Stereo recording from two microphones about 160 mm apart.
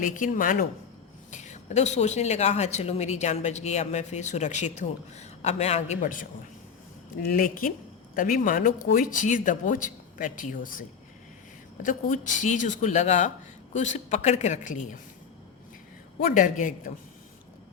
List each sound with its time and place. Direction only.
0.0 s speech: 55° left (ahead or behind)
1.3 s a woman's voice: 50° left (ahead or behind)
7.3 s a woman's voice: 60° left (ahead or behind)
16.1 s speech: 60° left (ahead or behind)